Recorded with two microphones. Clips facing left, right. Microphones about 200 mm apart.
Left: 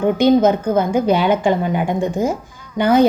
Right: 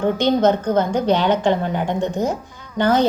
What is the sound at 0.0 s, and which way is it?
A woman's voice, 10° left (ahead or behind).